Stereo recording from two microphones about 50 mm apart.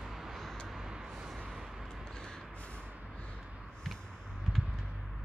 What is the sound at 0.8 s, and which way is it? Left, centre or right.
Vehicle, centre.